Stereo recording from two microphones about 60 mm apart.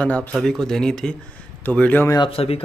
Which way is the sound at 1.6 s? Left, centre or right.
Left.